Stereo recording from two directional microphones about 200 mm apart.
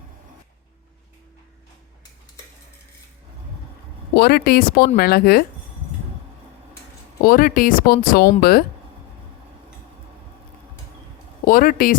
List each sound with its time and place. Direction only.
4.1 s speech: 50° left (ahead or behind)
7.2 s speech: 45° left (ahead or behind)
11.4 s speech: 45° left (ahead or behind)